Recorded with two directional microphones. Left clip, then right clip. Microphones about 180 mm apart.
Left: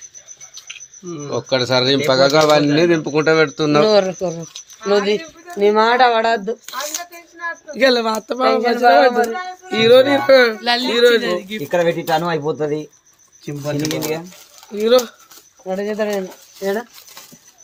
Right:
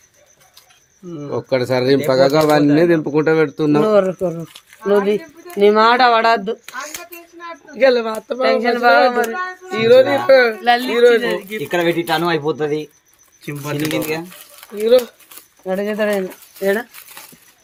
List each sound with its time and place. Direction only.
1.3 s speech: 25° right (ahead or behind)
3.8 s speech: 55° right (ahead or behind)
7.7 s speech: 65° left (ahead or behind)
8.4 s speech: 60° right (ahead or behind)
9.7 s speech: 55° left (ahead or behind); by 11.6 s 85° left
11.7 s speech: 30° right (ahead or behind)
13.4 s speech: 10° left (ahead or behind)
15.6 s speech: 60° right (ahead or behind)